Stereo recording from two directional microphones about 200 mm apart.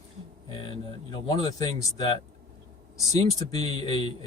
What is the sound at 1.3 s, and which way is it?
Speech, 20° left (ahead or behind).